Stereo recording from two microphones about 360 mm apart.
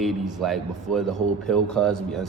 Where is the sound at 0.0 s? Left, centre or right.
Centre.